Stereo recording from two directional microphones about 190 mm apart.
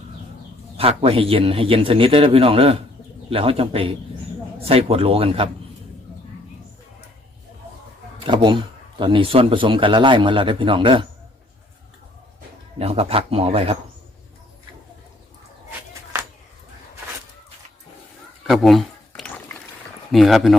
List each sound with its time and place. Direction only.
0.8 s a man's voice: 30° right (ahead or behind)
8.2 s a man's voice: 25° right (ahead or behind)
12.8 s speech: 30° right (ahead or behind)
18.4 s a sound: centre (ahead or behind)
20.1 s speech: centre (ahead or behind)